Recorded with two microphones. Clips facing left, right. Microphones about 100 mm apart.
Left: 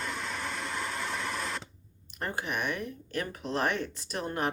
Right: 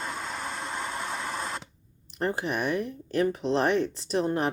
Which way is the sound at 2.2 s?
30° right (ahead or behind).